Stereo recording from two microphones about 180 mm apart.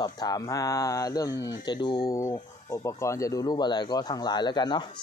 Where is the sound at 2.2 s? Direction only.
15° left (ahead or behind).